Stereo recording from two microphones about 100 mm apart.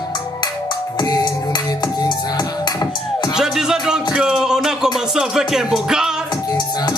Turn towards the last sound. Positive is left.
turn(degrees=-5)  # may be behind; listen again after turning